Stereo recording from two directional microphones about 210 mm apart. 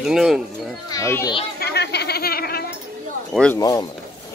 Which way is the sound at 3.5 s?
15° left (ahead or behind).